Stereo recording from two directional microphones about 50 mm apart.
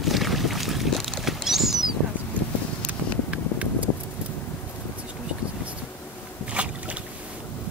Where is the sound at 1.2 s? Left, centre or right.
Centre.